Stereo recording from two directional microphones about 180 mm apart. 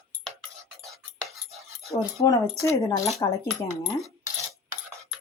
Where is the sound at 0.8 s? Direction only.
Centre (ahead or behind).